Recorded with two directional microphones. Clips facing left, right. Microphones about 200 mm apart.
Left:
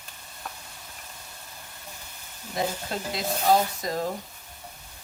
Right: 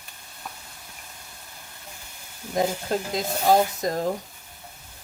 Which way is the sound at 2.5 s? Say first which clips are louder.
Right 5 dB; 45° right (ahead or behind).